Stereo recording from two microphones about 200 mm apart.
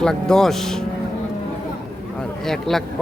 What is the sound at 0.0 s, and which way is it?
Speech, 5° left (ahead or behind).